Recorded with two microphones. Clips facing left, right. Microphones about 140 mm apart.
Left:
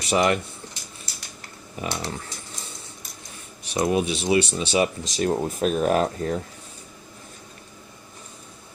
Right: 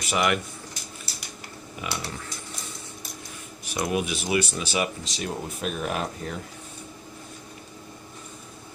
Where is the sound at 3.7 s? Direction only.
30° left (ahead or behind).